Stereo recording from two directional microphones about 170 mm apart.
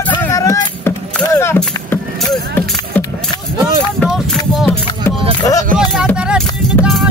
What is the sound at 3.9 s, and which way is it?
Music, centre (ahead or behind).